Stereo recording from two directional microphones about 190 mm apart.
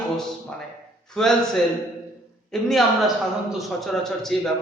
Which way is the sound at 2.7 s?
Centre (ahead or behind).